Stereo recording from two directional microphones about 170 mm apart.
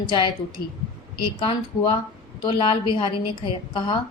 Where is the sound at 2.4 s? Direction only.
30° left (ahead or behind).